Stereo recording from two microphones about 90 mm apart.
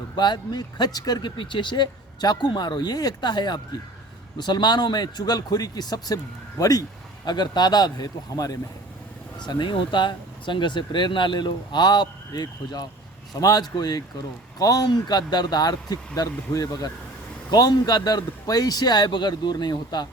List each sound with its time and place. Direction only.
0.2 s a man's voice: 55° left (ahead or behind)
9.4 s a man's voice: 55° left (ahead or behind)